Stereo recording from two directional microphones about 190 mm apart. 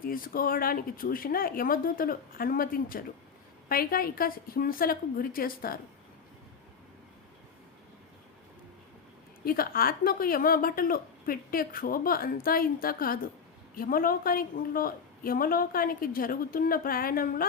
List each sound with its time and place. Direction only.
0.0 s speech: 50° left (ahead or behind)
9.4 s speech: 50° left (ahead or behind)